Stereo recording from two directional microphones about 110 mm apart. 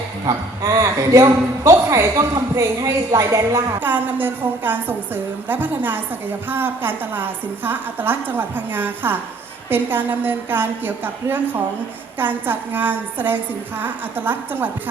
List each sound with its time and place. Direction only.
0.3 s a woman's voice: 25° right (ahead or behind)
3.8 s a woman's voice: 15° right (ahead or behind)